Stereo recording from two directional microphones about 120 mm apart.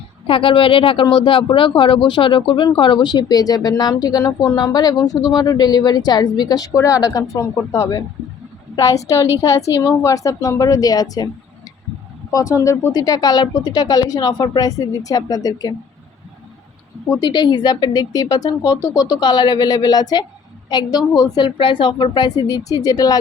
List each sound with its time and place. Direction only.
0.3 s a woman's voice: 45° left (ahead or behind); by 11.3 s 30° left (ahead or behind)
12.3 s speech: 30° left (ahead or behind)
17.2 s speech: 35° left (ahead or behind)